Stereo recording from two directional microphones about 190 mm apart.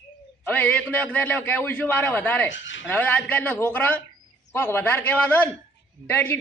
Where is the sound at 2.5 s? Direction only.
80° left.